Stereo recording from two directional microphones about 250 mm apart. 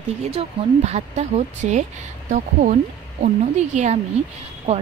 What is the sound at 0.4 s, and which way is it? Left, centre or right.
Speech, right.